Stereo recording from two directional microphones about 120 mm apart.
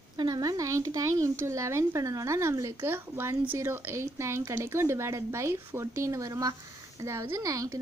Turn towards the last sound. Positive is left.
turn(degrees=-30)  # may be behind; listen again after turning